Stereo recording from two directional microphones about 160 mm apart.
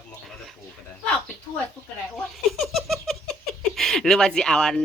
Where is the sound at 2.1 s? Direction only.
Centre (ahead or behind).